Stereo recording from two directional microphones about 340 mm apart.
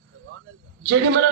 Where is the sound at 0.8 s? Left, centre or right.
Right.